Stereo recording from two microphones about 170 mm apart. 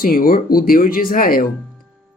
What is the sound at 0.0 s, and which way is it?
Speech, 60° left (ahead or behind).